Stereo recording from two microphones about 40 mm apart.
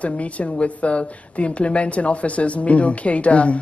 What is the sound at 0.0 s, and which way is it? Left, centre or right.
A woman's voice, left.